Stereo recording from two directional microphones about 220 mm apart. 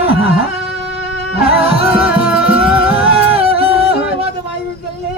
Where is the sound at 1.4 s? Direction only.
25° right (ahead or behind).